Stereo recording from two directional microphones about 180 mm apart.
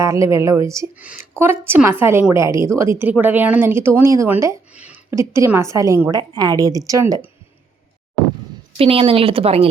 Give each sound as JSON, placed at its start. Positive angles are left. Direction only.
{"t": 0.0, "sound": "a woman's voice", "side_deg": -15}
{"t": 8.8, "sound": "speech", "side_deg": -30}